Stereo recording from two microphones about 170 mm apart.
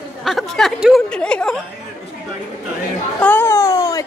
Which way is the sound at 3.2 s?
10° left (ahead or behind).